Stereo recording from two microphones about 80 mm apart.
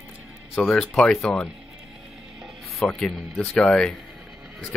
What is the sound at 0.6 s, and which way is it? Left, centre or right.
Speech, centre.